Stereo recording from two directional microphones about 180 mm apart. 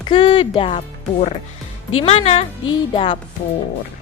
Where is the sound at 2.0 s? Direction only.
35° left (ahead or behind).